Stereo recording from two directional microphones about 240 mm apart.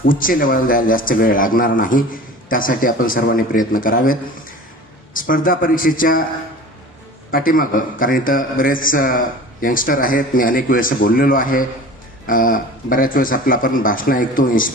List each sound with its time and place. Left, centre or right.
0.0 s a man's voice: left
7.3 s a man's voice: left